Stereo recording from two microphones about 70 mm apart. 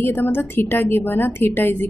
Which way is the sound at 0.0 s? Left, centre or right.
Left.